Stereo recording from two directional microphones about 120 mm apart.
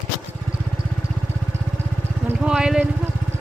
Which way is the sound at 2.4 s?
5° right (ahead or behind).